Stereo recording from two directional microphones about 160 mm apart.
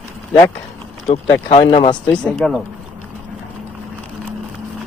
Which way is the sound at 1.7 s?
30° left (ahead or behind).